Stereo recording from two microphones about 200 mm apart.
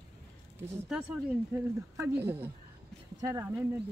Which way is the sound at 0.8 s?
5° right (ahead or behind).